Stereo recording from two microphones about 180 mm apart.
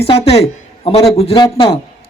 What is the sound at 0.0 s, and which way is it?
A man's voice, 35° left (ahead or behind).